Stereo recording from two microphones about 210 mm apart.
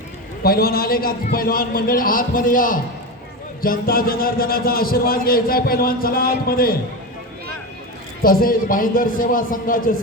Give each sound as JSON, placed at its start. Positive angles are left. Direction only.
{"t": 0.4, "sound": "a man's voice", "side_deg": 45}
{"t": 8.2, "sound": "a man's voice", "side_deg": 45}